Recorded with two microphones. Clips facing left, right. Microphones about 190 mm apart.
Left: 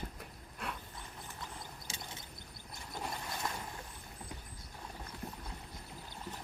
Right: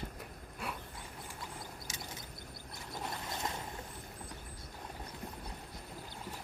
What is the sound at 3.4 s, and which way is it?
Vehicle, 20° right (ahead or behind).